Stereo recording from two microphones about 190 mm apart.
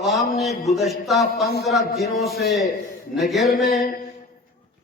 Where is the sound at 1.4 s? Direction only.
60° left (ahead or behind).